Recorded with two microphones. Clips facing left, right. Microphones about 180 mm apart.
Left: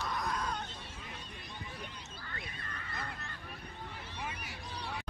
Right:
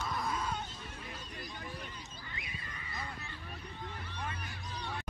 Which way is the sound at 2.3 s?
10° right (ahead or behind).